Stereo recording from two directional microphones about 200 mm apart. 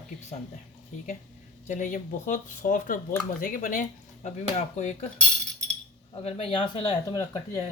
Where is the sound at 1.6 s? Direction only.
40° left (ahead or behind).